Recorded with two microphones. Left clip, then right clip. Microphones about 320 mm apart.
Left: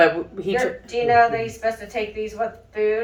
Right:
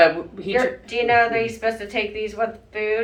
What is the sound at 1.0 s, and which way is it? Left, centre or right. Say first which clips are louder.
A woman's voice: left 1 dB; right.